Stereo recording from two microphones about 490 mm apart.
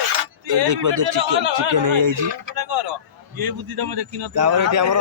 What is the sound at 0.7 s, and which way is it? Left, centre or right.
Speech, right.